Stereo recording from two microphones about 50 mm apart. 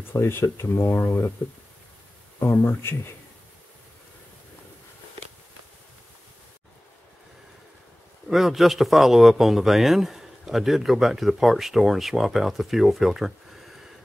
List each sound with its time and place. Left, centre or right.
0.1 s speech: left
2.5 s speech: left
8.3 s a man's voice: centre